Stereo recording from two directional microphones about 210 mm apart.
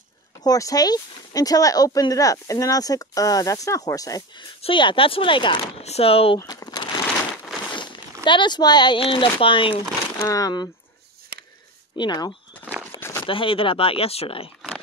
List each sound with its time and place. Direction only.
0.4 s speech: 15° left (ahead or behind)
12.0 s speech: 20° left (ahead or behind)